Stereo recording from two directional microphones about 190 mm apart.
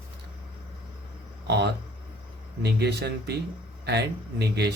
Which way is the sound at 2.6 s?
60° right (ahead or behind).